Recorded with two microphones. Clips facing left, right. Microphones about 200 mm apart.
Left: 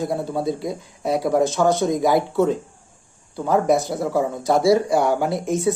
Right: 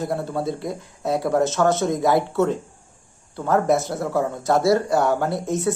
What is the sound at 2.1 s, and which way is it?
Speech, 15° left (ahead or behind).